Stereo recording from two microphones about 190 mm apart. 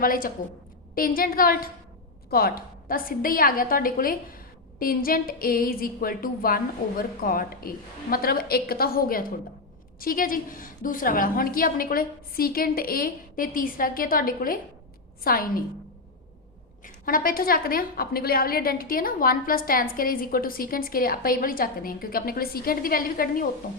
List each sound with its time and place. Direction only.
0.0 s a woman's voice: 50° left (ahead or behind)
16.8 s a woman's voice: 45° left (ahead or behind)